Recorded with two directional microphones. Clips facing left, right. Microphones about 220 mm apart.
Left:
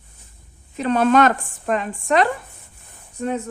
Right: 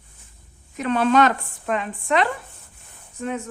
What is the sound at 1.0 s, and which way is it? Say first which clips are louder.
Speech: left 2 dB; 50° left (ahead or behind).